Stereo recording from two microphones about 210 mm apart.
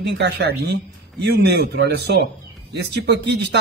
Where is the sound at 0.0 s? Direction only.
55° right (ahead or behind).